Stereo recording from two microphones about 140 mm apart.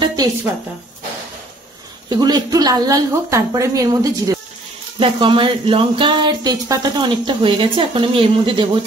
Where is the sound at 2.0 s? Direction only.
30° right (ahead or behind).